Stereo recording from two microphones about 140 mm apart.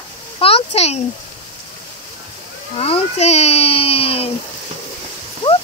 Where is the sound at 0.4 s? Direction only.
45° left (ahead or behind).